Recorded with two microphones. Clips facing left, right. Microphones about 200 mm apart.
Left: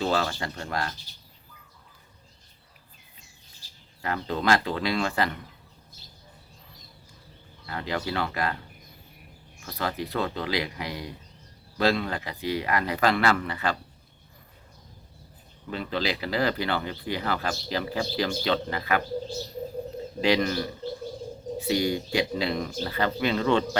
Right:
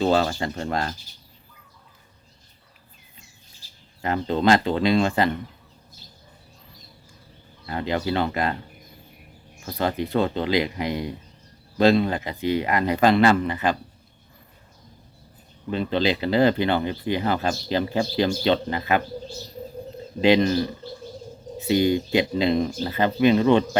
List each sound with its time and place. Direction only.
0.0 s speech: 25° right (ahead or behind)
4.0 s speech: 25° right (ahead or behind)
7.7 s speech: 25° right (ahead or behind)
9.6 s speech: 25° right (ahead or behind)
15.7 s speech: 20° right (ahead or behind)
20.2 s speech: 20° right (ahead or behind)
21.7 s speech: 20° right (ahead or behind)